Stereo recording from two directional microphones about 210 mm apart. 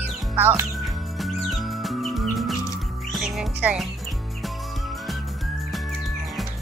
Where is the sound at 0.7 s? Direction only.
Centre (ahead or behind).